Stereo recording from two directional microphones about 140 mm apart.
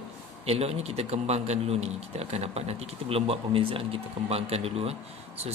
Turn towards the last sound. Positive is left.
turn(degrees=-45)  # may be behind; listen again after turning